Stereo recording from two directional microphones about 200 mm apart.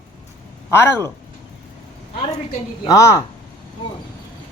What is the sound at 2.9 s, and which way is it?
Speech, 15° left (ahead or behind).